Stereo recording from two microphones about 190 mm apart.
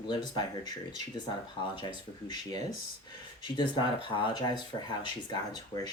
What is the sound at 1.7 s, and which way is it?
Speech, 25° left (ahead or behind).